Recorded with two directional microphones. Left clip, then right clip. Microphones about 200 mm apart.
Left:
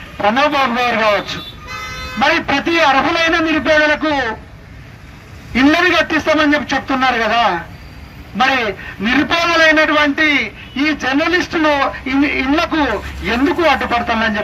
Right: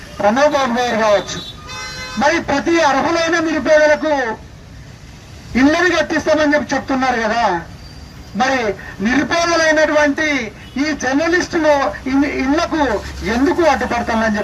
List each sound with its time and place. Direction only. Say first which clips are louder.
0.2 s a man's voice: even; 35° right (ahead or behind)
5.5 s a man's voice: left 2 dB; 40° right (ahead or behind)